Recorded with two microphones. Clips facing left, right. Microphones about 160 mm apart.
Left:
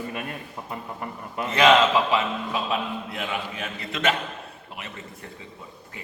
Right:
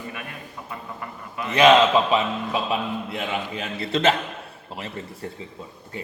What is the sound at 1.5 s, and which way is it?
A man's voice, 20° right (ahead or behind).